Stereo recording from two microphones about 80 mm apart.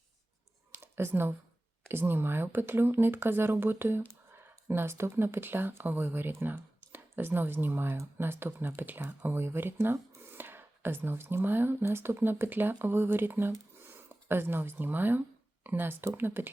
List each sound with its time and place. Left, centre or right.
0.9 s speech: right